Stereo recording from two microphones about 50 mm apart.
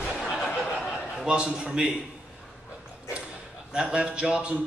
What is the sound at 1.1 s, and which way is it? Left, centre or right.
Speech, centre.